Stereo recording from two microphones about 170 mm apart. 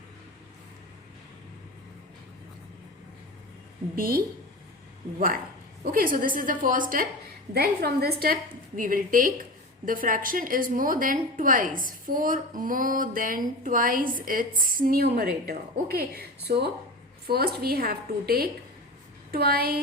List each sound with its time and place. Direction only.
3.9 s a woman's voice: 60° right (ahead or behind)
5.8 s a woman's voice: 60° right (ahead or behind)
7.5 s a woman's voice: 65° right (ahead or behind)